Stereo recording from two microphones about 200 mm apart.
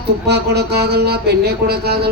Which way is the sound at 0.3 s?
55° right (ahead or behind).